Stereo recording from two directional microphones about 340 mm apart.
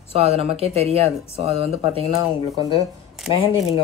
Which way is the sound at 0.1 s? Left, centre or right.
Centre.